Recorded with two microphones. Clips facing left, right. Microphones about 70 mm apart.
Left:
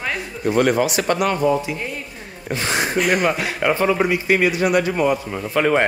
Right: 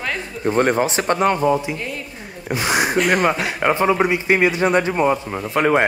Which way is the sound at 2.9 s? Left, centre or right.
Centre.